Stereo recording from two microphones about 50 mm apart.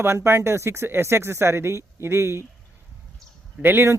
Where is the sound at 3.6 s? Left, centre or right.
Right.